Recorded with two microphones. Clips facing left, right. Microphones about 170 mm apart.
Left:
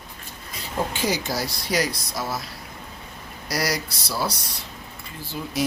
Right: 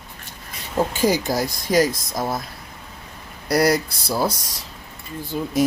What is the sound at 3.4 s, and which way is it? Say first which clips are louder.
Speech: right 8 dB; 55° right (ahead or behind).